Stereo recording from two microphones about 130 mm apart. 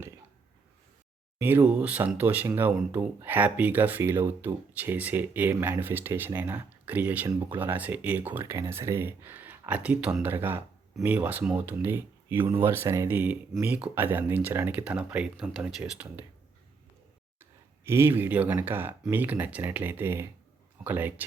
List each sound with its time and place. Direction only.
1.4 s speech: 15° right (ahead or behind)
17.8 s speech: 20° right (ahead or behind)